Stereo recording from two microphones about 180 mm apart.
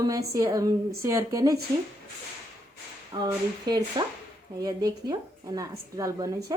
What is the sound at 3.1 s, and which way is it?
A woman's voice, 20° right (ahead or behind).